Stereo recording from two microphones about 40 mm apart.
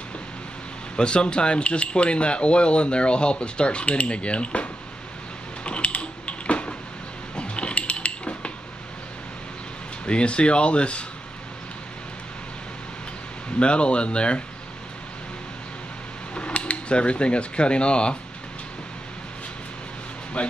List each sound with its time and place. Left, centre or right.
0.9 s speech: left
5.6 s typing: left
7.3 s a sound: left
10.0 s speech: left
13.6 s speech: left
16.3 s speech: left
20.4 s speech: left